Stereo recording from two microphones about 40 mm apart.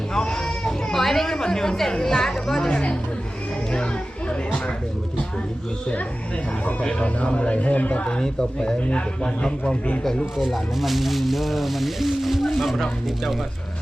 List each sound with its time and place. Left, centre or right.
0.1 s a sound: centre
2.6 s a man's voice: left
6.8 s speech: left
8.0 s a man's voice: centre
10.0 s speech: centre